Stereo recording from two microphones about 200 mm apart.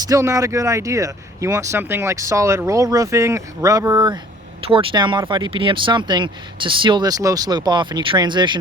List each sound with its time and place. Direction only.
0.0 s speech: 15° right (ahead or behind)